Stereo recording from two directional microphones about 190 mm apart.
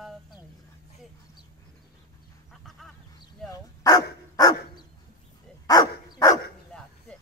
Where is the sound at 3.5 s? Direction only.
20° left (ahead or behind).